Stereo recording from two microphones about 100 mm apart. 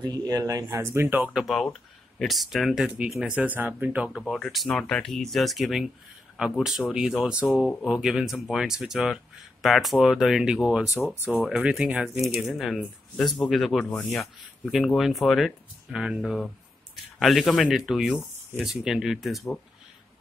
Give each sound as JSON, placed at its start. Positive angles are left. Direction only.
{"t": 0.0, "sound": "speech", "side_deg": -40}
{"t": 1.3, "sound": "speech", "side_deg": 0}
{"t": 4.3, "sound": "speech", "side_deg": 0}